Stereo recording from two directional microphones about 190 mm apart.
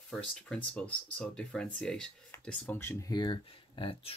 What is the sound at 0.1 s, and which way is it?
Speech, 5° left (ahead or behind).